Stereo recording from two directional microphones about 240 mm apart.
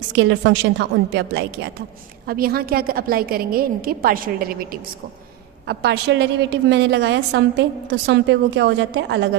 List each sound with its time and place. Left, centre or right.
0.1 s a woman's voice: right